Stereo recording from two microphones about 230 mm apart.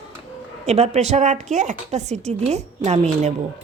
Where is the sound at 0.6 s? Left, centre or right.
Right.